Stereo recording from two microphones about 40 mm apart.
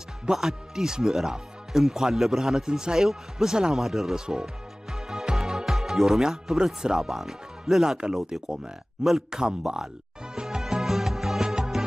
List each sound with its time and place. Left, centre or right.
0.3 s speech: centre
4.9 s music: centre
9.3 s a man's voice: centre
10.3 s music: centre